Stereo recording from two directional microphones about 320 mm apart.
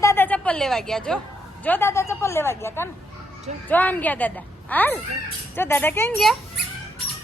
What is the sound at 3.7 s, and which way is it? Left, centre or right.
Child singing, centre.